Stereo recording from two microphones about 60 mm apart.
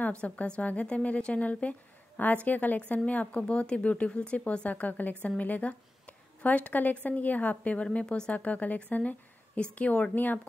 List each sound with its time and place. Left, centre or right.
0.2 s speech: left
4.6 s speech: left